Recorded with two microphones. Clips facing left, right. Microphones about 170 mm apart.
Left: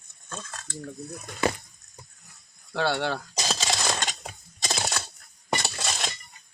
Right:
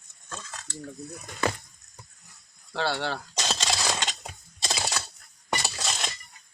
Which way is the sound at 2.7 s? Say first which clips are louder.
Left 3 dB; 55° left (ahead or behind).